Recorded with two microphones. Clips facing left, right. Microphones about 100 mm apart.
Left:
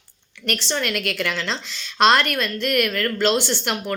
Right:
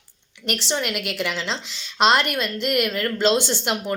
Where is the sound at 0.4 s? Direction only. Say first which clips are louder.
Even; 15° right (ahead or behind).